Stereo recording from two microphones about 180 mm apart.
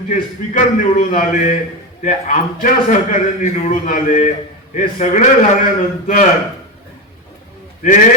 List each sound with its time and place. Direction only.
0.1 s a man's voice: 45° left (ahead or behind)